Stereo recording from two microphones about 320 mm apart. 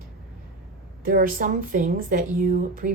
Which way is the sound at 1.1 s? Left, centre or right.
Right.